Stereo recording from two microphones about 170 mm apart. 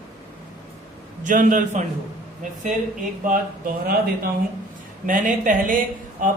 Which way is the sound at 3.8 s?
60° right (ahead or behind).